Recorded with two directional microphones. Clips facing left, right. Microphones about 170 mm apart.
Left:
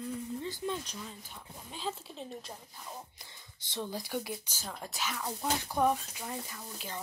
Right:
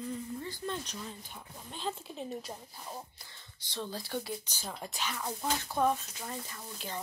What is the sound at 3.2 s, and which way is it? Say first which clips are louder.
Speech: left 1 dB; 20° left (ahead or behind).